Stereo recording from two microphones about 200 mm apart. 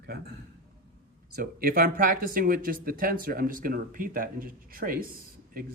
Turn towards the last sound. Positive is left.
turn(degrees=-45)  # may be behind; listen again after turning